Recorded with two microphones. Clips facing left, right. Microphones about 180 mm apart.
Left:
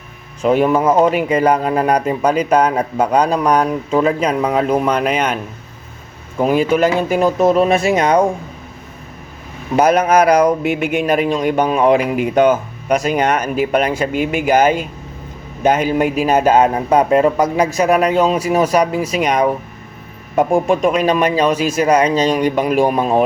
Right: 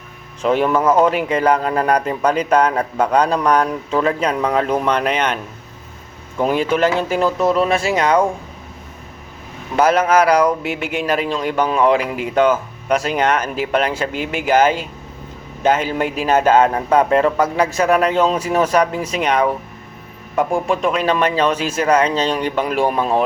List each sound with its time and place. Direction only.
0.4 s a man's voice: 10° left (ahead or behind)
9.7 s a man's voice: 15° left (ahead or behind)